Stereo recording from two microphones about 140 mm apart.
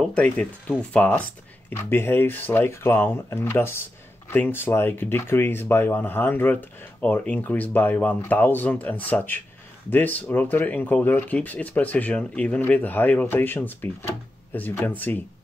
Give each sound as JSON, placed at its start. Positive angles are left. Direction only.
{"t": 0.0, "sound": "speech", "side_deg": 5}